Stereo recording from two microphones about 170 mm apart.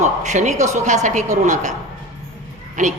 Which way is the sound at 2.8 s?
50° right (ahead or behind).